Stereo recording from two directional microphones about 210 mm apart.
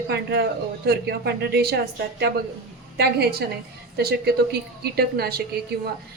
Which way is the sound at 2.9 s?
50° right (ahead or behind).